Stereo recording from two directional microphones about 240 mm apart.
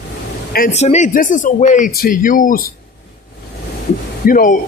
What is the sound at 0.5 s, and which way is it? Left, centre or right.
Speech, left.